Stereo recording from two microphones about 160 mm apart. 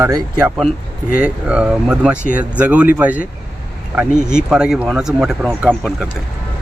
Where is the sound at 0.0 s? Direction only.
20° right (ahead or behind).